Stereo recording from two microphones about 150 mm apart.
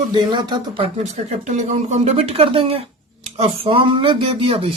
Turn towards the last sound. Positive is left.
turn(degrees=-40)  # may be behind; listen again after turning